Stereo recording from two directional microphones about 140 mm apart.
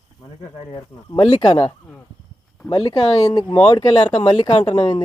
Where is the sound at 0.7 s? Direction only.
35° left (ahead or behind).